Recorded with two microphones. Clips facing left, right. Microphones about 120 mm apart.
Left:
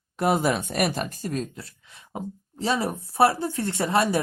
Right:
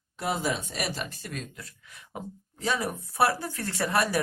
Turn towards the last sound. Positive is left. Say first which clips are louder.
# left 4 dB
turn(degrees=25)  # may be behind; listen again after turning